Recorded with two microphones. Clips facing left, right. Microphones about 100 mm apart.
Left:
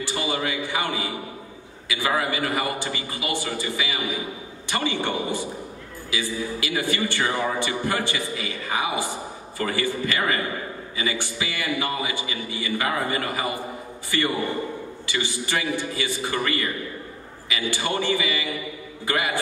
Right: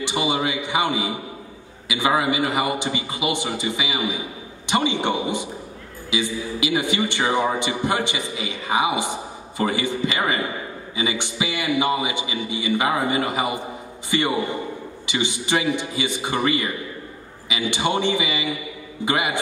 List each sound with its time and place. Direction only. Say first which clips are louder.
0.0 s a man's voice: right 4 dB; 20° right (ahead or behind)